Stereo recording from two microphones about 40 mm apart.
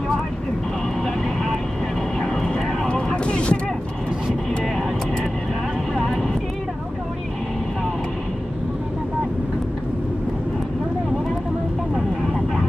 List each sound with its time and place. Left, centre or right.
1.0 s vehicle: centre
3.3 s a sound: left
5.9 s vehicle: centre
12.2 s vehicle: centre